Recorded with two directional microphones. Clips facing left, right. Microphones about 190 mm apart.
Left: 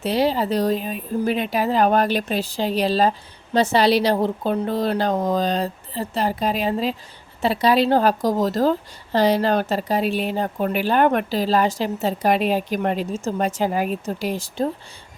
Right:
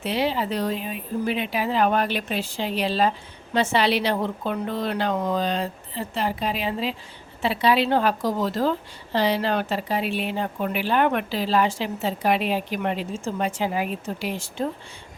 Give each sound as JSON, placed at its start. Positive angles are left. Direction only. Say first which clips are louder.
{"t": 0.0, "sound": "speech", "louder": "left 4 dB", "side_deg": 40}